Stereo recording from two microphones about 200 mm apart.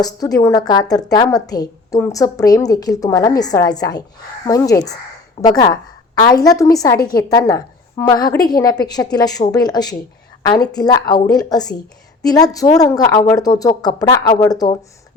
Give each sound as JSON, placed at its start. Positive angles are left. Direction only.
{"t": 0.0, "sound": "a woman's voice", "side_deg": 20}
{"t": 7.0, "sound": "a woman's voice", "side_deg": 50}
{"t": 7.3, "sound": "a woman's voice", "side_deg": 15}